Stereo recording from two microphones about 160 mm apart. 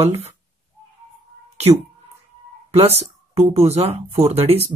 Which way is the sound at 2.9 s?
40° right (ahead or behind).